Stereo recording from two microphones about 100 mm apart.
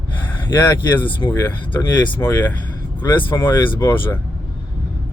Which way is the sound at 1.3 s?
20° left (ahead or behind).